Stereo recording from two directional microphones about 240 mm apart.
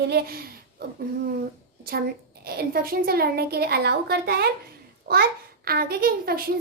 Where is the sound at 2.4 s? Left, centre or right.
Right.